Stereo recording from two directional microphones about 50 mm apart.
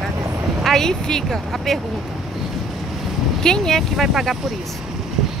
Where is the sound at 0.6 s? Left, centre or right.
Centre.